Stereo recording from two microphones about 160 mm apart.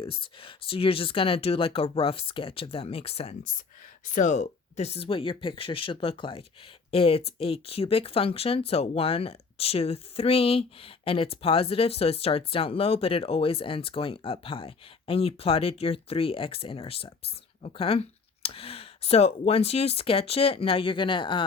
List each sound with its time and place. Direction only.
0.0 s speech: 35° left (ahead or behind)
4.0 s speech: 50° left (ahead or behind); by 21.4 s 30° left (ahead or behind)